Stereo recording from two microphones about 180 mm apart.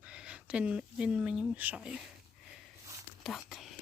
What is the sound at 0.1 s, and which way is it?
Speech, 5° right (ahead or behind).